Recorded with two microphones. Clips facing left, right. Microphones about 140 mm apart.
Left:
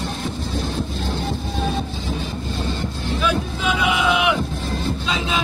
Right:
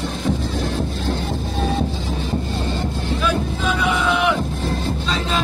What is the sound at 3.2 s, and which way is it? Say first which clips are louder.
Boat: even; 10° left (ahead or behind).